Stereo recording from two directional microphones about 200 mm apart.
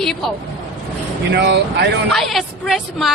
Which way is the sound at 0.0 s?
Centre (ahead or behind).